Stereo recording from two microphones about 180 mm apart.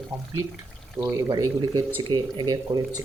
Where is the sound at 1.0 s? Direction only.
15° right (ahead or behind).